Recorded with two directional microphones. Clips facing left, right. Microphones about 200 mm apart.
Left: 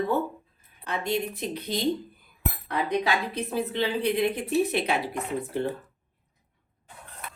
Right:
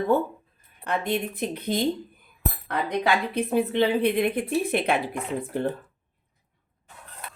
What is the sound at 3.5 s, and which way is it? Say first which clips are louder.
A woman's voice: right 6 dB; 60° right (ahead or behind).